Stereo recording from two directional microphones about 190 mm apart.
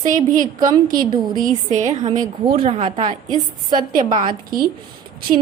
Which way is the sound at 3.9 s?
45° right (ahead or behind).